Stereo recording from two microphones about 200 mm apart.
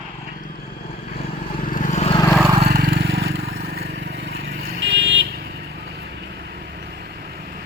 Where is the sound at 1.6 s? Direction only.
40° left (ahead or behind).